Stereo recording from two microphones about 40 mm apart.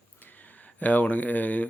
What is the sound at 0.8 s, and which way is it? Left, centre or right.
Speech, left.